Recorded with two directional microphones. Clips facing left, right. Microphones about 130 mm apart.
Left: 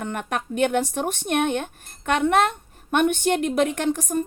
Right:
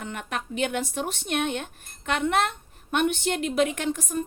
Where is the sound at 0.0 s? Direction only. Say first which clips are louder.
Left 5 dB; 45° left (ahead or behind).